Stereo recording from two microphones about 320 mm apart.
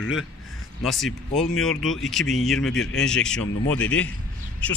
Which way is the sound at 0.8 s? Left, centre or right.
Centre.